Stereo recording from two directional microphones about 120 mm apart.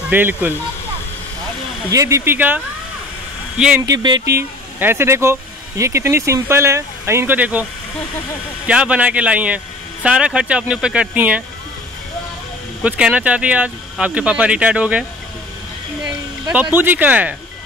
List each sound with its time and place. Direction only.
0.1 s speech: 15° right (ahead or behind)
1.9 s speech: 25° right (ahead or behind); by 3.8 s 5° right (ahead or behind)
3.8 s speech: 35° right (ahead or behind)
4.3 s speech: 20° right (ahead or behind)
8.6 s speech: 10° right (ahead or behind)
12.8 s speech: 10° right (ahead or behind)
16.7 s speech: 15° right (ahead or behind)